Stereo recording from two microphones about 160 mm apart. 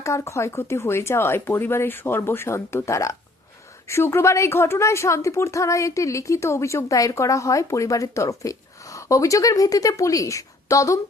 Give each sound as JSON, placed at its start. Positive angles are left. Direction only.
{"t": 0.0, "sound": "a woman's voice", "side_deg": 20}